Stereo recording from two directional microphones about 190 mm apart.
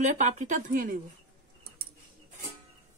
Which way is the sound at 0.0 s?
40° right (ahead or behind).